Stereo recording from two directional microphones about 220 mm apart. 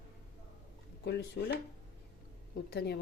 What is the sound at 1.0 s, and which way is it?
Speech, 50° left (ahead or behind).